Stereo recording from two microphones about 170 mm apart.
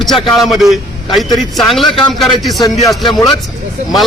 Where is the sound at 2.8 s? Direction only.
25° left (ahead or behind).